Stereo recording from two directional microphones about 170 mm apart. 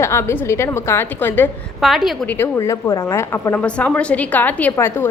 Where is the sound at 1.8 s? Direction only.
Centre (ahead or behind).